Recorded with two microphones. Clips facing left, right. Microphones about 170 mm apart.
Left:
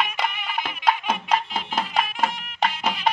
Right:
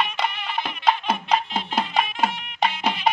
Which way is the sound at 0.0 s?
10° left (ahead or behind).